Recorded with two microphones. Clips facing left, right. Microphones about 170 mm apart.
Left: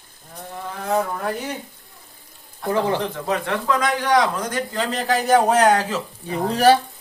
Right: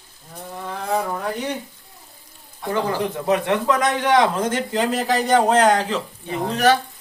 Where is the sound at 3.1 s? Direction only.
20° right (ahead or behind).